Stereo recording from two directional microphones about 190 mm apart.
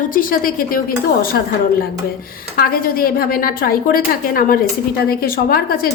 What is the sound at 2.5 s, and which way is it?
A woman's voice, 50° left (ahead or behind).